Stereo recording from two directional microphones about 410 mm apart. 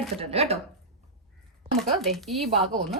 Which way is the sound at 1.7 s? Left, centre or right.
Centre.